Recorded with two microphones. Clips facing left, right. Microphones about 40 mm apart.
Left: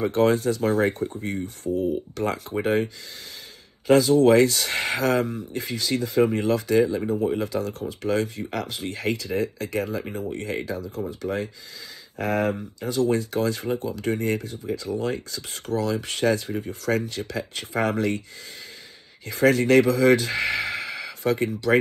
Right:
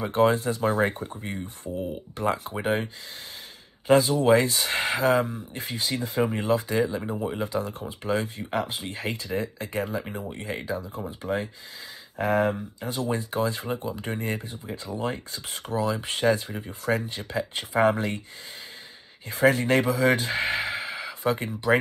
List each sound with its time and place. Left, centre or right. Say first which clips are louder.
0.0 s speech: left 2 dB; right
19.2 s speech: left 2 dB; right